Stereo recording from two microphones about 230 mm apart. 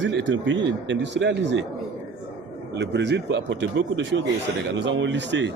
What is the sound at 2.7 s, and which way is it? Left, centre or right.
A man's voice, right.